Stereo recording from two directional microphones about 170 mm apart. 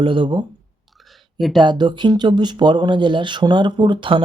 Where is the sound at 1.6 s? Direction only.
25° right (ahead or behind).